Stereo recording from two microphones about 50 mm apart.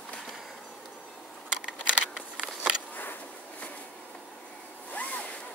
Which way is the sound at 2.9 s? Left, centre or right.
Left.